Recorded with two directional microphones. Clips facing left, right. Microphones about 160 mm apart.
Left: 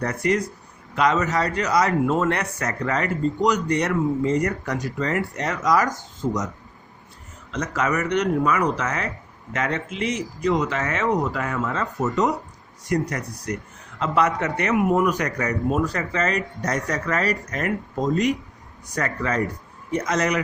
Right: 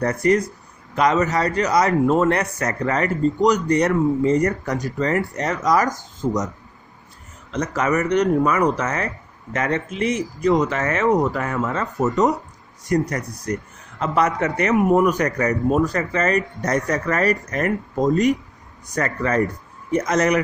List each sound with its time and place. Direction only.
0.0 s a man's voice: 45° right (ahead or behind)
7.5 s a man's voice: 40° right (ahead or behind)